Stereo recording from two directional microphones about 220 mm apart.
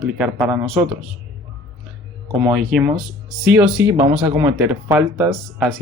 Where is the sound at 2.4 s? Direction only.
5° right (ahead or behind).